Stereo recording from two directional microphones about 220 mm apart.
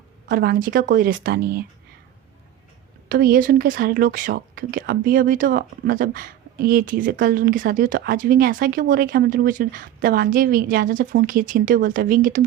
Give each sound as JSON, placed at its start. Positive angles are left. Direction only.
{"t": 0.3, "sound": "speech", "side_deg": -40}
{"t": 3.1, "sound": "speech", "side_deg": -40}